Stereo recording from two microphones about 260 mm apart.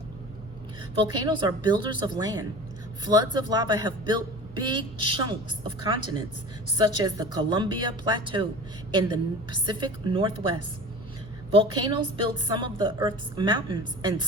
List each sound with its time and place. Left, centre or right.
0.9 s a woman's voice: centre